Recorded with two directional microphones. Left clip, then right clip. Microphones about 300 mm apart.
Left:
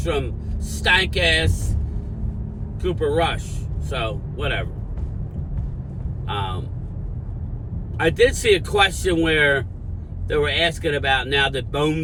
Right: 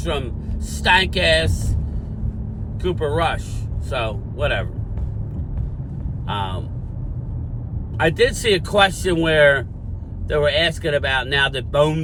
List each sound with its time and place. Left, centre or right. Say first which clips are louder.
0.1 s speech: left 1 dB; centre
2.9 s speech: even; centre
6.2 s speech: right 1 dB; centre
7.9 s speech: even; centre